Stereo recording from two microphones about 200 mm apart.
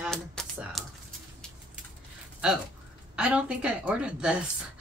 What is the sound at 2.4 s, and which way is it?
Speech, 5° right (ahead or behind).